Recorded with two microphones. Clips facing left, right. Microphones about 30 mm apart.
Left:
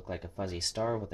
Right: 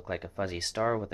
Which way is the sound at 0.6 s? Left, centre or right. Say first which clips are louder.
Right 1 dB; centre.